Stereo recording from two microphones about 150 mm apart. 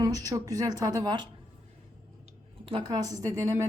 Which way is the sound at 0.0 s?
25° right (ahead or behind).